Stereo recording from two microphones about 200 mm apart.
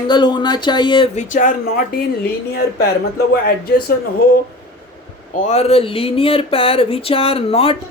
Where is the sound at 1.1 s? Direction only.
40° left (ahead or behind).